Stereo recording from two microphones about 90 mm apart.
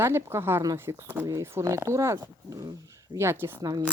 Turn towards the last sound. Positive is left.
turn(degrees=-25)  # may be behind; listen again after turning